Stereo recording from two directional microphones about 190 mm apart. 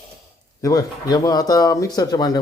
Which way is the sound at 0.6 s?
20° left (ahead or behind).